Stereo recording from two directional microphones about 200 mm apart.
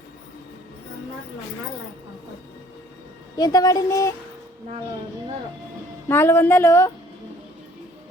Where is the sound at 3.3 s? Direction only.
20° left (ahead or behind).